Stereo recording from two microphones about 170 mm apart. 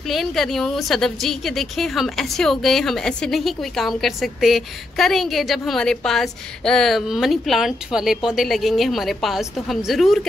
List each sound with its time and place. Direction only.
0.1 s a woman's voice: centre (ahead or behind)